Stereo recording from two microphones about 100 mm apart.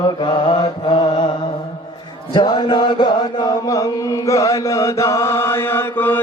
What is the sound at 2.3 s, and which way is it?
Chant, 50° left (ahead or behind).